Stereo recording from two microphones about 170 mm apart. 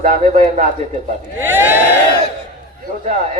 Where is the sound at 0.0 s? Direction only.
45° right (ahead or behind).